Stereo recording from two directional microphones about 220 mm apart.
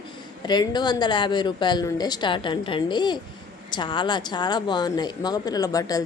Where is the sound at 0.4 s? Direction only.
20° left (ahead or behind).